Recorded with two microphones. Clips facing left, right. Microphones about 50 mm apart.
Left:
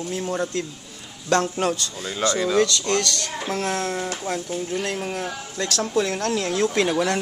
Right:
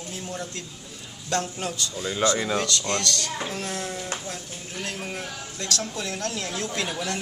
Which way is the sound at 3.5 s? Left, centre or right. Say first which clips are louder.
Left 6 dB; left.